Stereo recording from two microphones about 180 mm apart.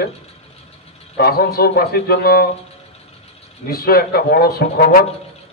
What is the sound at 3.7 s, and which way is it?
A man's voice, 55° left (ahead or behind).